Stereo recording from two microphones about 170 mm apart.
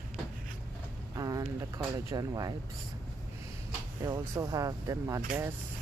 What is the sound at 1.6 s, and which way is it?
Speech, 20° right (ahead or behind).